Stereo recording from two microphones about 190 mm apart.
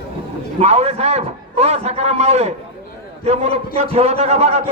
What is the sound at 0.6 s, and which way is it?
A man's voice, 35° right (ahead or behind).